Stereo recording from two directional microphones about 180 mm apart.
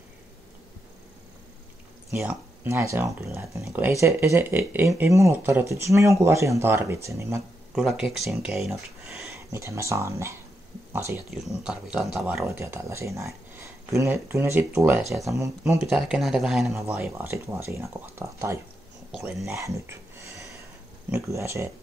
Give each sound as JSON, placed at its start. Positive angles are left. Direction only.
{"t": 2.0, "sound": "speech", "side_deg": -15}
{"t": 7.7, "sound": "speech", "side_deg": -5}
{"t": 9.3, "sound": "speech", "side_deg": -15}
{"t": 11.2, "sound": "speech", "side_deg": 0}
{"t": 12.4, "sound": "speech", "side_deg": -15}
{"t": 15.7, "sound": "speech", "side_deg": -5}
{"t": 16.7, "sound": "speech", "side_deg": -15}